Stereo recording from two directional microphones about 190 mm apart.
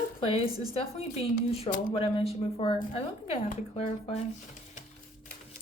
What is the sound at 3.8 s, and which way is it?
A woman's voice, 35° left (ahead or behind).